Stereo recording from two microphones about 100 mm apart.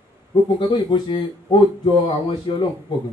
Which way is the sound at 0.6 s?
50° left (ahead or behind).